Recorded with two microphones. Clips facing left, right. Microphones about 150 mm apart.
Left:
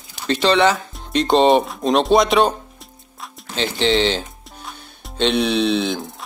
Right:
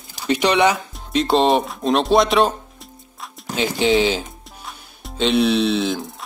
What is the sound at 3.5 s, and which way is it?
Speech, 10° right (ahead or behind).